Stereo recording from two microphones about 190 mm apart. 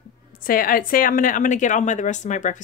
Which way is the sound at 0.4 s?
50° left (ahead or behind).